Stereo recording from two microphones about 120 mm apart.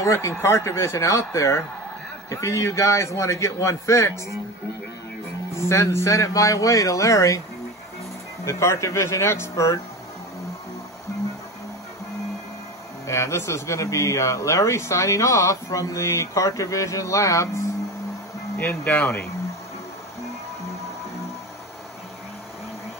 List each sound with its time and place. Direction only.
0.0 s speech: 20° left (ahead or behind)
5.7 s speech: 25° left (ahead or behind)
8.5 s speech: 25° left (ahead or behind)
13.0 s speech: 25° left (ahead or behind)
18.6 s speech: 15° left (ahead or behind)